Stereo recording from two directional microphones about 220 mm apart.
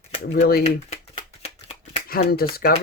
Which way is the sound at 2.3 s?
45° left (ahead or behind).